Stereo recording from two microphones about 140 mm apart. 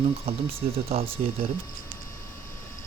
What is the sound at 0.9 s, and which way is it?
Speech, 45° right (ahead or behind).